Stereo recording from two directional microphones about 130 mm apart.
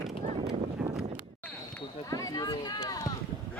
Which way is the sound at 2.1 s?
30° left (ahead or behind).